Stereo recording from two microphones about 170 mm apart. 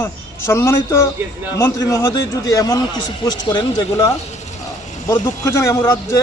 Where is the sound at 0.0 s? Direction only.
15° left (ahead or behind).